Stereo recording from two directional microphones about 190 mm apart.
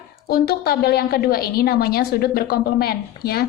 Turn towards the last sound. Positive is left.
turn(degrees=55)  # may be behind; listen again after turning